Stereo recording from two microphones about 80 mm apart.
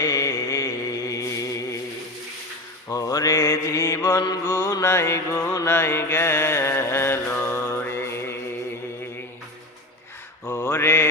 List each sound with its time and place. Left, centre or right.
0.0 s chant: left
2.9 s mantra: left
10.4 s mantra: left